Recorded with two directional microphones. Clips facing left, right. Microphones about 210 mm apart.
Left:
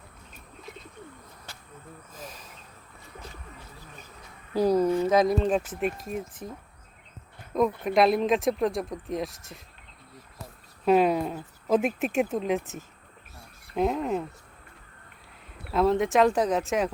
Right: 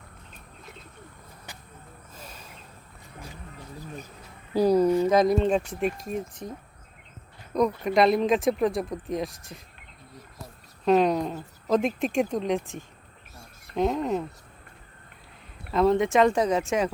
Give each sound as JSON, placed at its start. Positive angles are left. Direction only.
{"t": 1.5, "sound": "a sound", "side_deg": -15}
{"t": 5.0, "sound": "speech", "side_deg": 5}
{"t": 7.5, "sound": "speech", "side_deg": 0}
{"t": 10.8, "sound": "speech", "side_deg": 5}
{"t": 15.7, "sound": "speech", "side_deg": 0}